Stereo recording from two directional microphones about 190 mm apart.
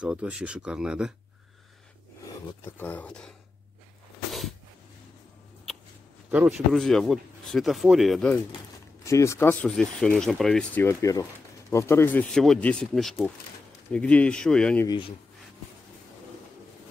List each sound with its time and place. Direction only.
0.0 s speech: 5° right (ahead or behind)
2.6 s speech: 10° left (ahead or behind)
4.3 s a sound: centre (ahead or behind)
6.3 s speech: 5° right (ahead or behind)
9.0 s speech: 15° left (ahead or behind)
14.9 s speech: 25° left (ahead or behind)